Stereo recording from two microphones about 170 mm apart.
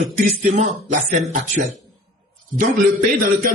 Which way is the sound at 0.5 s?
45° right (ahead or behind).